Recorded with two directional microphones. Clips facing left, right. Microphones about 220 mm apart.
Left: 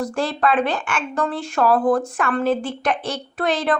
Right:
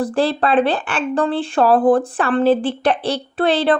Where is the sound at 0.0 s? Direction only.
35° right (ahead or behind).